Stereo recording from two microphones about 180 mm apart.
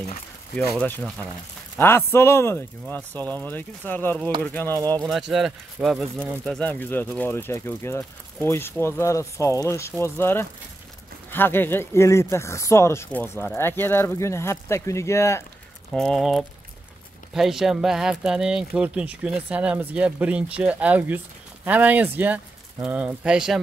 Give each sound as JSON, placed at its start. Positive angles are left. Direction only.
{"t": 0.6, "sound": "speech", "side_deg": 10}
{"t": 4.7, "sound": "speech", "side_deg": -20}
{"t": 5.3, "sound": "speech", "side_deg": 0}
{"t": 15.9, "sound": "speech", "side_deg": 0}